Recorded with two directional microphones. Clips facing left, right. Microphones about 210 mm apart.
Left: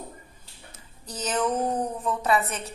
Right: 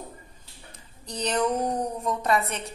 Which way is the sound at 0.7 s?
5° left (ahead or behind).